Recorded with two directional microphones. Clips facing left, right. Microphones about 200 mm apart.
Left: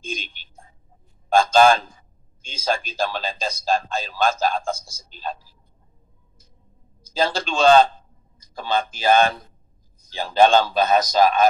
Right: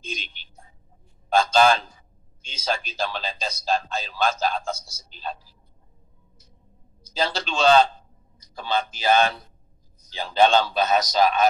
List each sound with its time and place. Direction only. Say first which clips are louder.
0.0 s a sound: left 4 dB; 50° left (ahead or behind)
1.3 s a man's voice: left 3 dB; 50° left (ahead or behind)
7.0 s a man's voice: left 4 dB; 50° left (ahead or behind)